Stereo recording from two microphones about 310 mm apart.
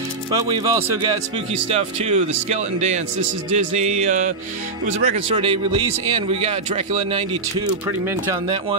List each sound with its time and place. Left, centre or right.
0.3 s speech: centre